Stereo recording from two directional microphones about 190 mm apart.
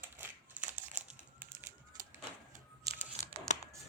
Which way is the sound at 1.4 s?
10° right (ahead or behind).